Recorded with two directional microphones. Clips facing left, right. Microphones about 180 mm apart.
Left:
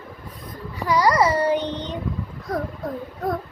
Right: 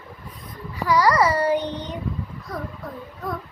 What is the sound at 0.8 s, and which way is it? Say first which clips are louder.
Child singing: even; 20° left (ahead or behind).